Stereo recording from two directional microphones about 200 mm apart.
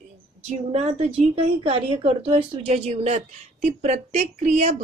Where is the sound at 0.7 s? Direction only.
30° right (ahead or behind).